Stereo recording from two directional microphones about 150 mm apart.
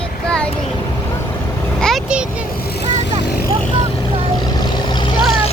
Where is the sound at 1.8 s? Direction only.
Centre (ahead or behind).